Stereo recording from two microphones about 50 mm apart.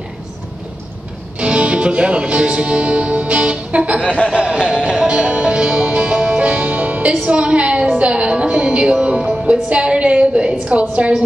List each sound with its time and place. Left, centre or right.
1.4 s speech: right
4.3 s music: centre